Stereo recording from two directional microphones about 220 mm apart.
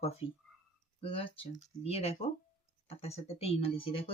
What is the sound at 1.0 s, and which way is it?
Speech, 25° left (ahead or behind).